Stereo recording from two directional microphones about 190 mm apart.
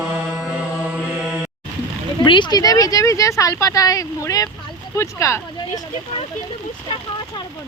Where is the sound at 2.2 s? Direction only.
25° left (ahead or behind).